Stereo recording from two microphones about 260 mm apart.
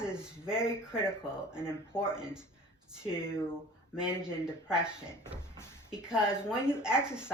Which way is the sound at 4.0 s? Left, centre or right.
Centre.